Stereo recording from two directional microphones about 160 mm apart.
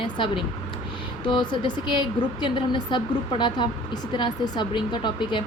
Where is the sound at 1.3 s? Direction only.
30° left (ahead or behind).